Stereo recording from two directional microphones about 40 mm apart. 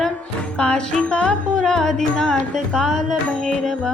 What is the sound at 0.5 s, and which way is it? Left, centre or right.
Music, left.